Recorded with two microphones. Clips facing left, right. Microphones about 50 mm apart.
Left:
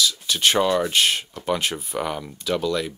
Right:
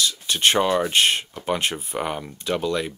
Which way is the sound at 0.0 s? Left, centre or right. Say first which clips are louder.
Even; right.